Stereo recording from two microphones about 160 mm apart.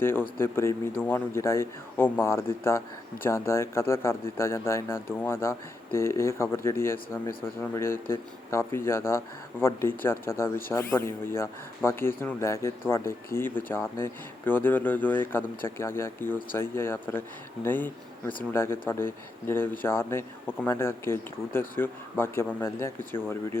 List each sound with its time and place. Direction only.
0.0 s speech: 15° left (ahead or behind)